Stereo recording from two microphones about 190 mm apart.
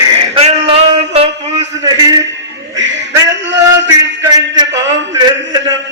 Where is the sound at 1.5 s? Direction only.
20° right (ahead or behind).